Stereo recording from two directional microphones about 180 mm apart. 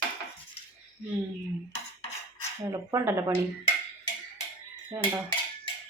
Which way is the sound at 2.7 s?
15° right (ahead or behind).